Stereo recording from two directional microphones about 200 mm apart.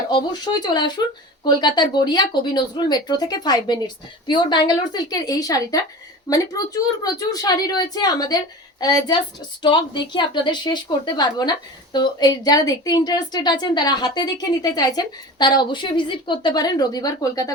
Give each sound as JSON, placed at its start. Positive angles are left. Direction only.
{"t": 0.1, "sound": "a woman's voice", "side_deg": 20}